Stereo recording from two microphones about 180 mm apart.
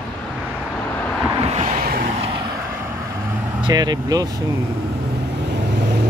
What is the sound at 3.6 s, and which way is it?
Speech, 20° right (ahead or behind).